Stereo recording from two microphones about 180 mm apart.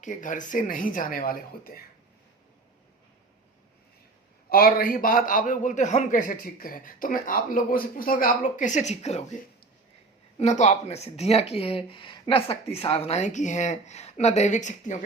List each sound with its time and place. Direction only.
0.0 s a man's voice: 45° left (ahead or behind)
4.4 s a man's voice: 55° left (ahead or behind); by 9.2 s 35° left (ahead or behind)
10.3 s speech: 40° left (ahead or behind)